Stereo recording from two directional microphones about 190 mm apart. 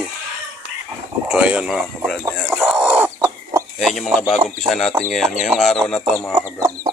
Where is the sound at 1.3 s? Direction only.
5° right (ahead or behind).